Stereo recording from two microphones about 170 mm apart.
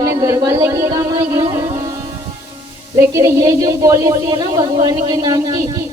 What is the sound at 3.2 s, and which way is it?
A woman's voice, 15° right (ahead or behind).